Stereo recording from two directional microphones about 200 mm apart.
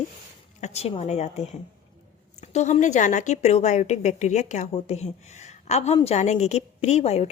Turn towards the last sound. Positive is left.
turn(degrees=30)  # may be behind; listen again after turning